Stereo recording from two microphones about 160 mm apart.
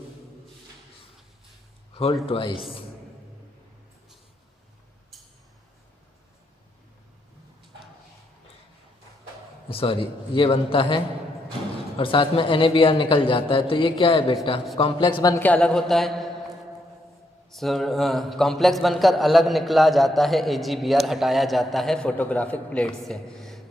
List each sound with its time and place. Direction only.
1.9 s a sound: 35° left (ahead or behind)
2.2 s speech: 35° left (ahead or behind)
5.1 s a sound: centre (ahead or behind)
9.6 s speech: 35° left (ahead or behind)
15.4 s a man's voice: 10° left (ahead or behind)
17.5 s a man's voice: centre (ahead or behind)